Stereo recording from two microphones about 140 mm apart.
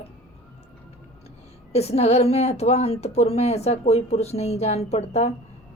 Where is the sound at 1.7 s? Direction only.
50° left (ahead or behind).